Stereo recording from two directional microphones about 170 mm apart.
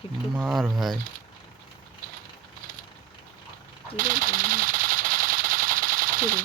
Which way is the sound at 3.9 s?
55° right (ahead or behind).